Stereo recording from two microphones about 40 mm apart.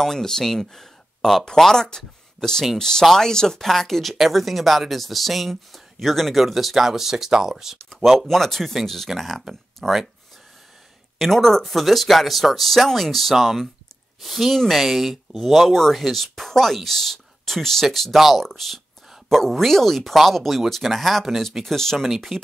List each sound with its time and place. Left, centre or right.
0.0 s speech: centre
11.1 s speech: centre